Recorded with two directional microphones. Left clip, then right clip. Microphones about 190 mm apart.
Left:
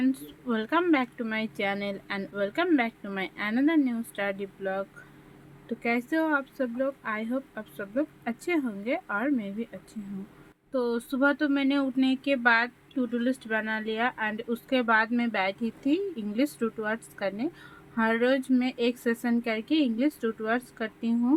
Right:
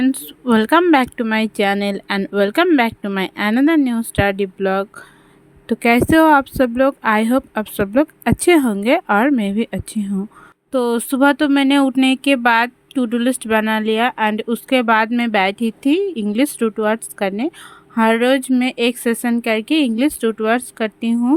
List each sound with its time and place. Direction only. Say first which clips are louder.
0.0 s speech: right 10 dB; 50° right (ahead or behind)